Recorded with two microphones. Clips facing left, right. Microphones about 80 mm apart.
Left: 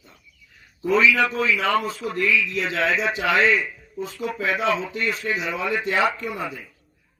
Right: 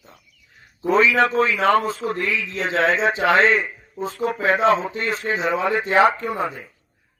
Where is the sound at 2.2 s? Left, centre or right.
Right.